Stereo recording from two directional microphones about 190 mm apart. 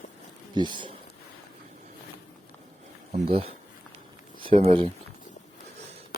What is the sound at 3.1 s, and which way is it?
Speech, 30° right (ahead or behind).